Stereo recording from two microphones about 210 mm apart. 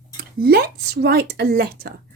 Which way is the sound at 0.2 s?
45° right (ahead or behind).